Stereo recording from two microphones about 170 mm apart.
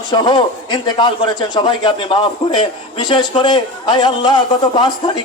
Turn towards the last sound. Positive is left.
turn(degrees=25)  # may be behind; listen again after turning